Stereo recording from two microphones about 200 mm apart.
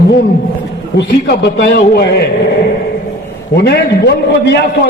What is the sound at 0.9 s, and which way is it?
A man's voice, 60° left (ahead or behind).